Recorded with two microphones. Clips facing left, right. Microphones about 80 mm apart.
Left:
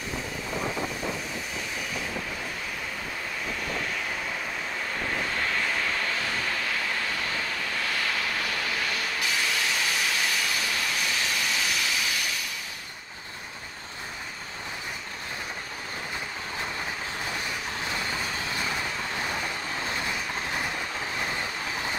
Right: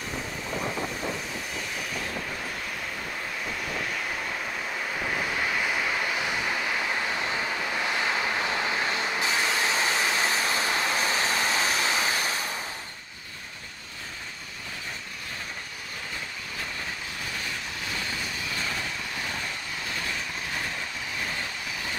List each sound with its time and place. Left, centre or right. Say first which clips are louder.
3.8 s vehicle: even; centre; by 12.5 s right